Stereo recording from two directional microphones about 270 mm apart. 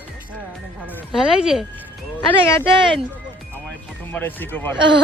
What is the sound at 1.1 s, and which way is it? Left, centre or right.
Speech, centre.